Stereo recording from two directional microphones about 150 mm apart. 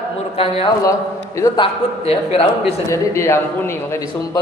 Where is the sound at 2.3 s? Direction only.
40° left (ahead or behind).